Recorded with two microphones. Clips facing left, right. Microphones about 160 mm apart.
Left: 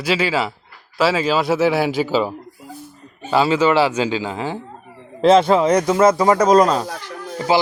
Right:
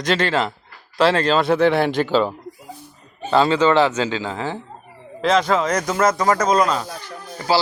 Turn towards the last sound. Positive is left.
turn(degrees=20)  # may be behind; listen again after turning